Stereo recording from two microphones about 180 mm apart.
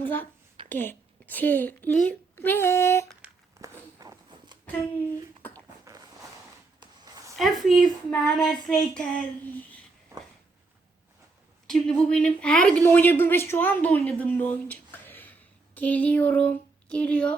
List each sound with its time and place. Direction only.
0.0 s a woman's voice: 10° left (ahead or behind)
3.6 s walk: 20° right (ahead or behind)
5.5 s a sound: 20° right (ahead or behind)
7.3 s speech: centre (ahead or behind)
11.7 s a woman's voice: 5° left (ahead or behind)